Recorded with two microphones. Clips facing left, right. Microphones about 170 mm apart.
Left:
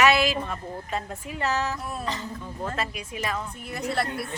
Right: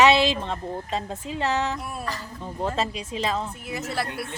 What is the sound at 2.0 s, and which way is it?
Speech, 20° left (ahead or behind).